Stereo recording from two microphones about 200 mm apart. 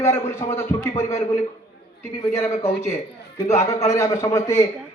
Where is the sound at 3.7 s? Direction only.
15° left (ahead or behind).